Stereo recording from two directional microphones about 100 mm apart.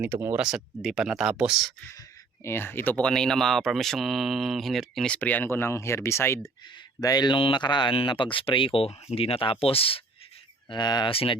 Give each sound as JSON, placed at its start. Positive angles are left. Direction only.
{"t": 0.0, "sound": "speech", "side_deg": -25}
{"t": 0.3, "sound": "speech", "side_deg": -5}
{"t": 2.0, "sound": "speech", "side_deg": 25}
{"t": 3.1, "sound": "speech", "side_deg": 5}
{"t": 5.1, "sound": "speech", "side_deg": 15}
{"t": 7.0, "sound": "speech", "side_deg": 40}
{"t": 7.3, "sound": "speech", "side_deg": 55}
{"t": 10.7, "sound": "speech", "side_deg": 45}
{"t": 11.1, "sound": "speech", "side_deg": 70}